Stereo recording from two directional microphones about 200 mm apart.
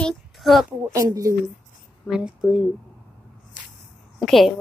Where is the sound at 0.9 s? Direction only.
15° right (ahead or behind).